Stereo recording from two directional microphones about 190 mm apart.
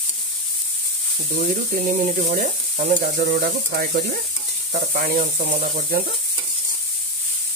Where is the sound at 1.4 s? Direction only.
45° right (ahead or behind).